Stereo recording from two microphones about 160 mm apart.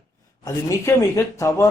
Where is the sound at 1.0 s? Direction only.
20° left (ahead or behind).